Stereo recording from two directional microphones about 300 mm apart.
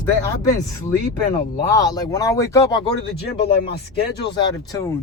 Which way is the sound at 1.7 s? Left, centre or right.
Centre.